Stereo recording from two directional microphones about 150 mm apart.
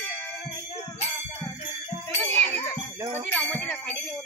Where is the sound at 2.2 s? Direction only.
15° left (ahead or behind).